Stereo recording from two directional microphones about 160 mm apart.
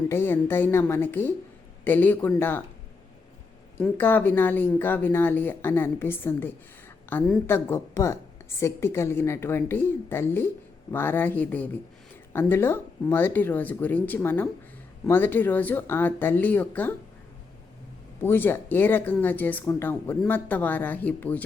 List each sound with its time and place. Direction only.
0.1 s a woman's voice: 15° left (ahead or behind)
3.8 s a woman's voice: 10° left (ahead or behind)
18.2 s a woman's voice: 15° left (ahead or behind)